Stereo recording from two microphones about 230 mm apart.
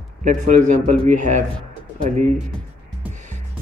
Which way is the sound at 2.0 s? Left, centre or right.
Right.